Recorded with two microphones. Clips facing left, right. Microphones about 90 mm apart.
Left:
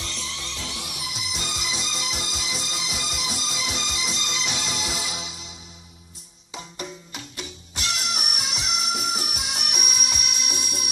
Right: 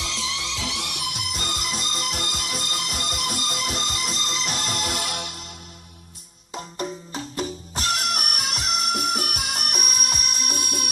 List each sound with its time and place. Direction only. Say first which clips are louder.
0.0 s music: right 5 dB; 90° right
0.7 s music: right 4 dB; 70° right (ahead or behind); by 4.6 s 45° right (ahead or behind)
4.8 s music: right 3 dB; 55° right (ahead or behind)
6.5 s music: right 5 dB; 40° right (ahead or behind)
8.8 s music: right 4 dB; centre (ahead or behind)
9.1 s music: right 3 dB; 50° right (ahead or behind)